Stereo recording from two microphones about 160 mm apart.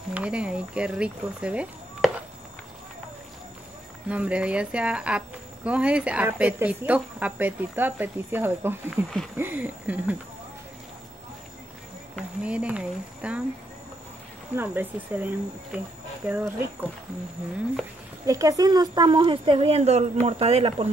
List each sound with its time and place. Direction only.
0.1 s speech: 5° right (ahead or behind)
4.1 s speech: 5° right (ahead or behind)
12.2 s speech: 5° right (ahead or behind)
14.5 s speech: 10° right (ahead or behind)
18.2 s speech: 20° right (ahead or behind); by 20.9 s 40° right (ahead or behind)